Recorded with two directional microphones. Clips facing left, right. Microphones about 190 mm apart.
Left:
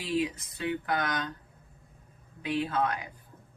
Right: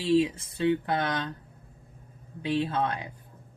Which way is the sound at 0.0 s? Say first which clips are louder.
Right 7 dB; 30° right (ahead or behind).